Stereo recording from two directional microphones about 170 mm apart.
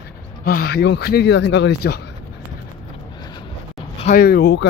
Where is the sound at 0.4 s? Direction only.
65° left (ahead or behind); by 2.0 s 80° left.